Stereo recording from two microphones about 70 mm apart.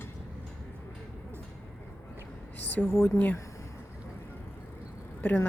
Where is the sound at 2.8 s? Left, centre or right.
Left.